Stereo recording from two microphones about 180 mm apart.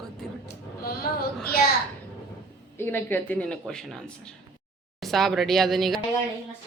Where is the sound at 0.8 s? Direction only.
55° left (ahead or behind).